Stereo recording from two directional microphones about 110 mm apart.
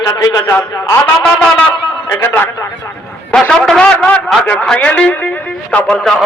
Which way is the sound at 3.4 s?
10° left (ahead or behind).